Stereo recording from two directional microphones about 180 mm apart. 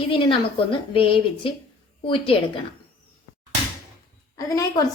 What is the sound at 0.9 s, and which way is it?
A woman's voice, 30° left (ahead or behind).